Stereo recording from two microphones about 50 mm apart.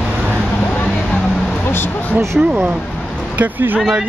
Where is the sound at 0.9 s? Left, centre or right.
Centre.